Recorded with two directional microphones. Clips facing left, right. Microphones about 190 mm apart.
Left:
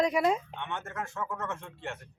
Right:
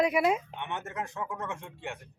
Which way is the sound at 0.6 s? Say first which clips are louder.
Right 1 dB; 20° right (ahead or behind).